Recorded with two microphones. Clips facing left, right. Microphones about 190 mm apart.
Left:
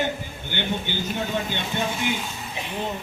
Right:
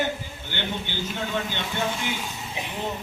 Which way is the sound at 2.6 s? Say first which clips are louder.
Right 1 dB; 15° right (ahead or behind).